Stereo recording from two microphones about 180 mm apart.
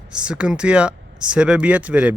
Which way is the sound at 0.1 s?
5° right (ahead or behind).